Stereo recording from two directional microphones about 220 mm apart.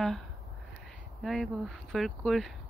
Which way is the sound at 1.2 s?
Centre (ahead or behind).